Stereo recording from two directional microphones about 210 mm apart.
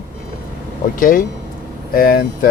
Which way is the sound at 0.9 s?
40° left (ahead or behind).